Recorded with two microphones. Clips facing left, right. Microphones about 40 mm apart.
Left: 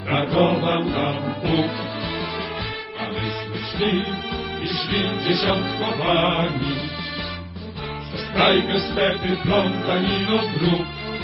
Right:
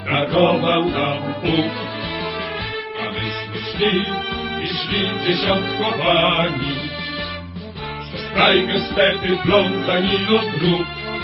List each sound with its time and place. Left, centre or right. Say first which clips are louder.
0.1 s mantra: right 3 dB; right
1.5 s speech: right 2 dB; right
3.8 s music: right 4 dB; right
8.4 s speech: right 2 dB; right
9.4 s music: right 5 dB; right
10.1 s music: right 4 dB; right